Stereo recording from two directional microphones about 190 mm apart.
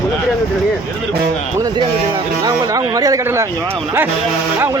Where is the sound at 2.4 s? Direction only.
20° right (ahead or behind).